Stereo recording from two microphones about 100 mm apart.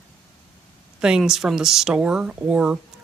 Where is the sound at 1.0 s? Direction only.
5° right (ahead or behind).